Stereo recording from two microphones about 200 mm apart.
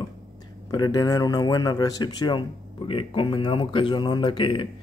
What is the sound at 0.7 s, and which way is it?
A man's voice, 20° left (ahead or behind).